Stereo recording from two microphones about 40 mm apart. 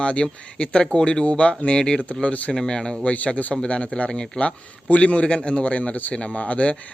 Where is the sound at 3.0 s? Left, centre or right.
Left.